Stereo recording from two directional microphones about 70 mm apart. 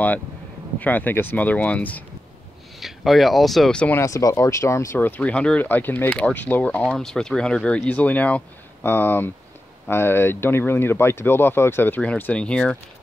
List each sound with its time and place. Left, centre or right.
0.7 s speech: left
2.8 s speech: centre
4.0 s speech: left
4.9 s speech: left
5.3 s speech: centre
5.6 s speech: left
6.1 s speech: centre
6.8 s speech: centre
8.8 s speech: left
12.0 s speech: left